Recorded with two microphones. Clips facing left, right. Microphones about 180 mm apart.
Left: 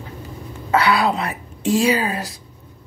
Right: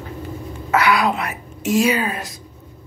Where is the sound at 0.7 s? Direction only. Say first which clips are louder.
Even; 30° left (ahead or behind).